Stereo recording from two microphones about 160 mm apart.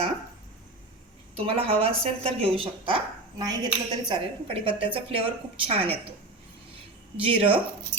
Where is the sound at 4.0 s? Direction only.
30° right (ahead or behind).